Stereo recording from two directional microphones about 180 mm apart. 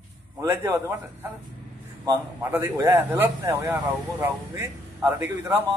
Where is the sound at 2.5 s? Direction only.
10° right (ahead or behind).